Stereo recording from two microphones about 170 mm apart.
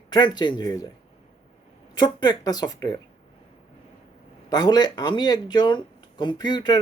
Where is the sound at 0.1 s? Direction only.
25° left (ahead or behind).